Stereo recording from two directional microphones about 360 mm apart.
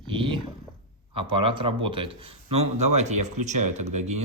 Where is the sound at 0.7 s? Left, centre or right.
Centre.